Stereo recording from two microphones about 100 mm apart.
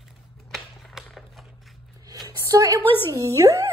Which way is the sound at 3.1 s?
35° right (ahead or behind).